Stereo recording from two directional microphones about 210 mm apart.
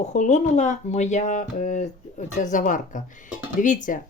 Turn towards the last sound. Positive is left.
turn(degrees=40)  # may be behind; listen again after turning